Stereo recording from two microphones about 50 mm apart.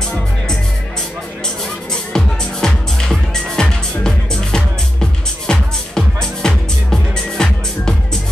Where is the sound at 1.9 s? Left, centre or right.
Centre.